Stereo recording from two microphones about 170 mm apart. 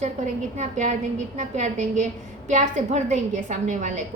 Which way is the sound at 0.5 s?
45° right (ahead or behind).